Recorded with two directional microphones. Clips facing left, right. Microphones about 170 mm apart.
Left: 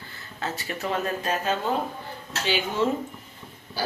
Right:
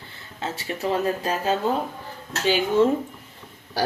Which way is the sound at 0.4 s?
25° right (ahead or behind).